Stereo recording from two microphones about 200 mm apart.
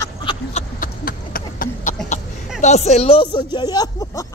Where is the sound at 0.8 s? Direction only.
50° left (ahead or behind).